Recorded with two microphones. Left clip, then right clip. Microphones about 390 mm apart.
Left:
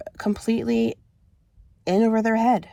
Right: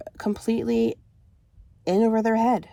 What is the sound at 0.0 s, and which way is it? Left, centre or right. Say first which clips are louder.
Speech: left 1 dB; centre.